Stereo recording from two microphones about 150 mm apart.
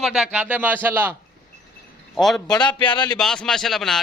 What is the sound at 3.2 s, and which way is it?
Speech, 5° left (ahead or behind).